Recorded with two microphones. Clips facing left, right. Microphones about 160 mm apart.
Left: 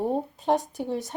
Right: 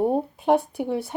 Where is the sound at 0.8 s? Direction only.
60° right (ahead or behind).